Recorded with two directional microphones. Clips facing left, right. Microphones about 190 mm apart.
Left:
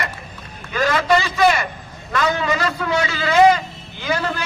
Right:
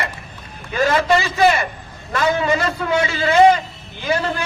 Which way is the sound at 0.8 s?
30° right (ahead or behind).